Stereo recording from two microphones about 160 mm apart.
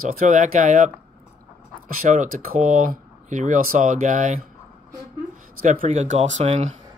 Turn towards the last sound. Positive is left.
turn(degrees=-45)  # may be behind; listen again after turning